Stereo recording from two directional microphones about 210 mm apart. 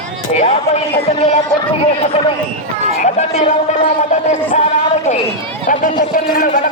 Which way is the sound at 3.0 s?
30° left (ahead or behind).